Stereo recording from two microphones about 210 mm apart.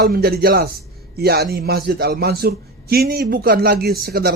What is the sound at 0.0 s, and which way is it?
Speech, 45° right (ahead or behind).